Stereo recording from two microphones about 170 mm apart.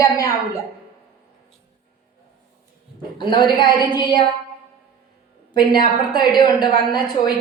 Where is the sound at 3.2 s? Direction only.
25° left (ahead or behind).